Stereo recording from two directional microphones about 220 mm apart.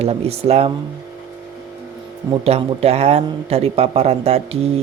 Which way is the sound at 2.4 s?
30° right (ahead or behind).